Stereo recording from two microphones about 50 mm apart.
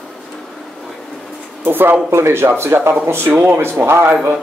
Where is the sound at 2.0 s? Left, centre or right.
Right.